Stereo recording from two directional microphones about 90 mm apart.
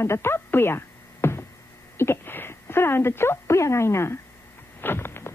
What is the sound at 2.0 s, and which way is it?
Speech, 25° left (ahead or behind).